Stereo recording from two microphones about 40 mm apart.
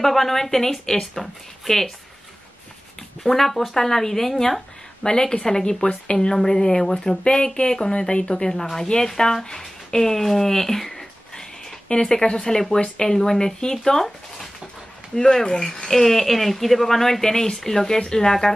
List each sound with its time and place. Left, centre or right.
0.0 s speech: centre
3.3 s speech: centre
5.0 s a woman's voice: centre
6.1 s speech: centre
12.8 s a woman's voice: left
13.1 s speech: centre